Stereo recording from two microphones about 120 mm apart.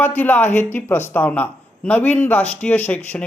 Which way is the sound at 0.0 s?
15° left (ahead or behind).